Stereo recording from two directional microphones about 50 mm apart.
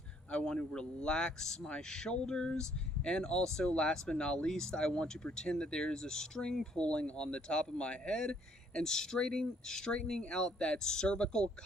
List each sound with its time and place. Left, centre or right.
0.3 s speech: centre